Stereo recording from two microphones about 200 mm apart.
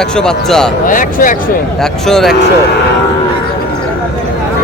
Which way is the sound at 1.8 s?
Centre (ahead or behind).